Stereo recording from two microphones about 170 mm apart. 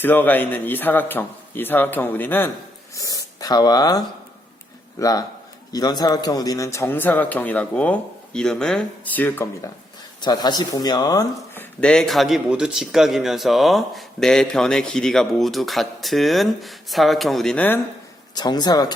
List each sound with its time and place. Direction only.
0.0 s a man's voice: 10° left (ahead or behind)
10.2 s speech: 25° left (ahead or behind); by 17.7 s 5° left (ahead or behind)
18.3 s a man's voice: 25° left (ahead or behind)